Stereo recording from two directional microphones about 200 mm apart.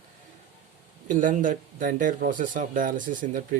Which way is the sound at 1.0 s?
40° right (ahead or behind).